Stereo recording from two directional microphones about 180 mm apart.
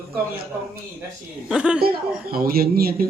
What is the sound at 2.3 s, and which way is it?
Speech, 55° right (ahead or behind).